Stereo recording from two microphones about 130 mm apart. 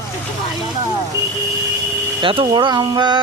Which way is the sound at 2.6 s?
35° right (ahead or behind).